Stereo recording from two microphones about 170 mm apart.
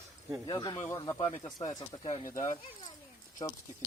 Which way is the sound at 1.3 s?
45° left (ahead or behind).